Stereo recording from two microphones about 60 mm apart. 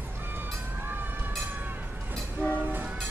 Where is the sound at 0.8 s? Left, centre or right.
Right.